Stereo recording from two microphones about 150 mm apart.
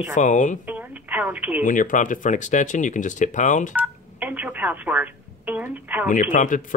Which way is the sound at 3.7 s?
10° right (ahead or behind).